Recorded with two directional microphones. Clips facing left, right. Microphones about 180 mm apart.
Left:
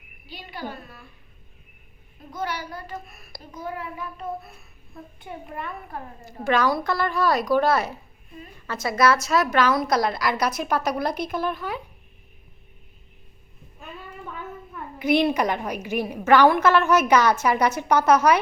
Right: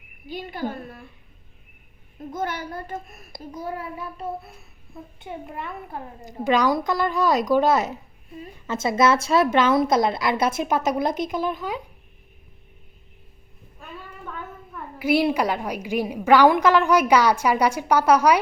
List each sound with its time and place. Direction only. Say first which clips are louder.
0.3 s a child's voice: right 6 dB; 50° right (ahead or behind)
2.3 s a child's voice: right 2 dB; 50° right (ahead or behind)
3.6 s child singing: right 1 dB; 40° right (ahead or behind)
5.2 s a woman's voice: right 1 dB; 25° right (ahead or behind)
14.9 s a woman's voice: even; 10° right (ahead or behind)